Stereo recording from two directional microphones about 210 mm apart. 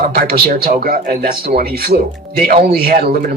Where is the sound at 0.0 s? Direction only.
45° right (ahead or behind).